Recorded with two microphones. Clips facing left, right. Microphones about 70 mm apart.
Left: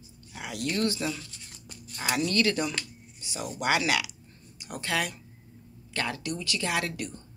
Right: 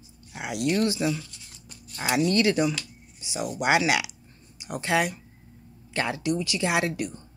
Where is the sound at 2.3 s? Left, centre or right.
Centre.